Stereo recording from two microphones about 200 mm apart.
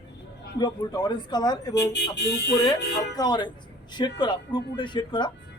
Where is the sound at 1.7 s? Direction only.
55° left (ahead or behind).